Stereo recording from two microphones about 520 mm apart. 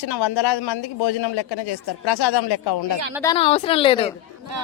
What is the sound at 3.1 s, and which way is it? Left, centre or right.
Speech, centre.